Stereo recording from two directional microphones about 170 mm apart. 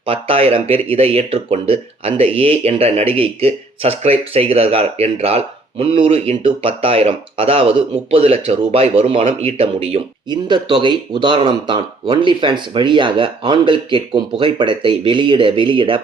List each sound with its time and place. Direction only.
0.0 s speech: 35° right (ahead or behind)